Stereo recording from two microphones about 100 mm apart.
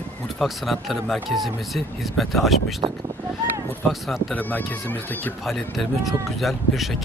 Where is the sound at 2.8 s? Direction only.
55° right (ahead or behind).